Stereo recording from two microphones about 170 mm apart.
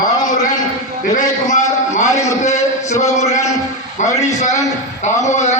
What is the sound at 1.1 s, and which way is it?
A man's voice, 45° left (ahead or behind).